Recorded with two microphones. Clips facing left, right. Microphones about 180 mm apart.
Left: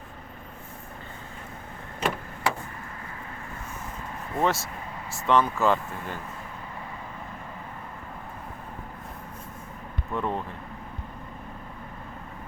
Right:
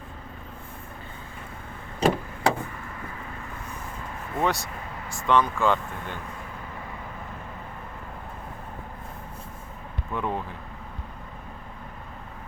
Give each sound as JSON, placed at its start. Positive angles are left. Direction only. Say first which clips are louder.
{"t": 2.0, "sound": "vehicle", "louder": "right 6 dB", "side_deg": -35}
{"t": 4.4, "sound": "speech", "louder": "left 1 dB", "side_deg": 0}
{"t": 10.2, "sound": "speech", "louder": "even", "side_deg": 0}